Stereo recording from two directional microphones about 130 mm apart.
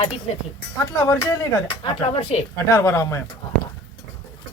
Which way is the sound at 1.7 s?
35° left (ahead or behind).